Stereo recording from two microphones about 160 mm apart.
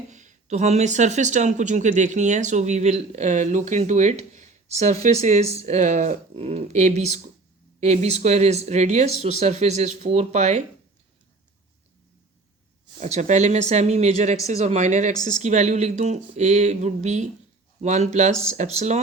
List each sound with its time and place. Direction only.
0.1 s speech: 50° right (ahead or behind)
13.0 s speech: 45° right (ahead or behind)